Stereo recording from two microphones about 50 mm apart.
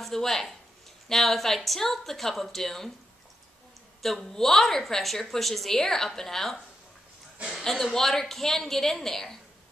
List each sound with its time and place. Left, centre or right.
0.0 s a woman's voice: centre
4.0 s a woman's voice: centre
7.6 s a woman's voice: centre